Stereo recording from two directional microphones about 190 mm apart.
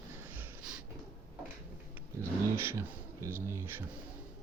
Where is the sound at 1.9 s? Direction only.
15° right (ahead or behind).